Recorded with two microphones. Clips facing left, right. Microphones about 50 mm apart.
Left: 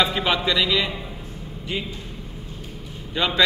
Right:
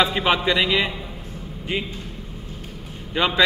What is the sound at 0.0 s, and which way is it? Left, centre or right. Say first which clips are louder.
Speech: right 2 dB; right.